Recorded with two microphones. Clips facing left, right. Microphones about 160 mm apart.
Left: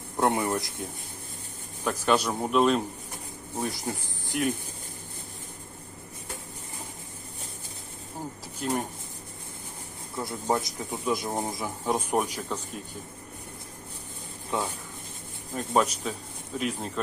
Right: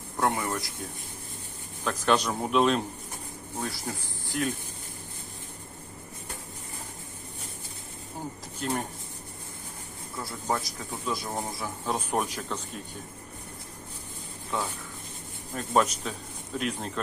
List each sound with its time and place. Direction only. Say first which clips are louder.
0.2 s a man's voice: left 3 dB; 20° left (ahead or behind)
1.8 s a man's voice: left 1 dB; 10° left (ahead or behind)
3.6 s speech: left 3 dB; 20° left (ahead or behind)
8.6 s a man's voice: left 1 dB; 5° left (ahead or behind)
10.2 s a man's voice: left 3 dB; 20° left (ahead or behind)
14.5 s a man's voice: left 2 dB; 15° left (ahead or behind)
15.5 s a man's voice: even; 5° left (ahead or behind)